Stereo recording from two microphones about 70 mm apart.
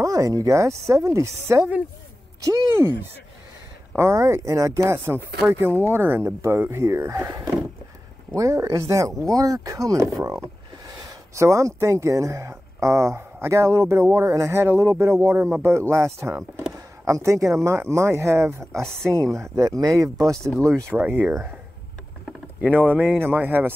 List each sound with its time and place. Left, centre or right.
0.0 s speech: right
2.7 s speech: right
9.0 s speech: right
9.9 s speech: right
16.7 s a sound: right
17.6 s speech: right
20.3 s speech: centre
20.6 s speech: right
21.0 s speech: right
22.6 s speech: right